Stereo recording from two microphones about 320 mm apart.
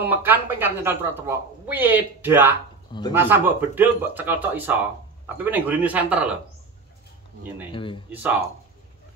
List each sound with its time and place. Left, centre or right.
0.0 s speech: centre
7.7 s speech: centre
8.1 s speech: centre